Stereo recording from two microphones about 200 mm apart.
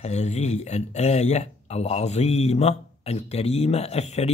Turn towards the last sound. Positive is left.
turn(degrees=35)  # may be behind; listen again after turning